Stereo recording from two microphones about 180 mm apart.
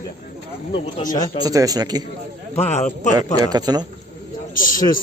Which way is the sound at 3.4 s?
20° right (ahead or behind).